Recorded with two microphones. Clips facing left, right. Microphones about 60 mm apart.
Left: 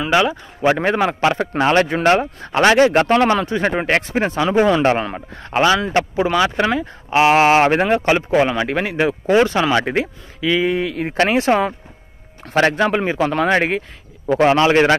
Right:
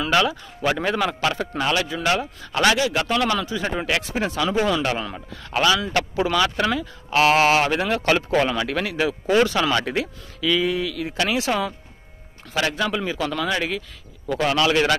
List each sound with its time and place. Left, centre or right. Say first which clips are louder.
0.0 s speech: left 4 dB; left
1.5 s speech: left 8 dB; left
8.0 s speech: left 4 dB; left
14.2 s speech: left 7 dB; left